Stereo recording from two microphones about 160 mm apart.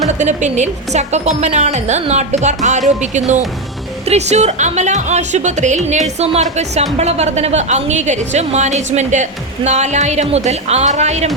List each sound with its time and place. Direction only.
0.2 s a woman's voice: 50° right (ahead or behind)